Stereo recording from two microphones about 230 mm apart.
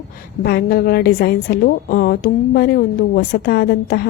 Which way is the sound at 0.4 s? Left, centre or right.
Left.